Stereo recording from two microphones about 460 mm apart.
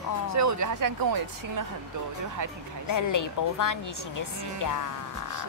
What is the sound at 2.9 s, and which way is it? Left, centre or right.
Speech, left.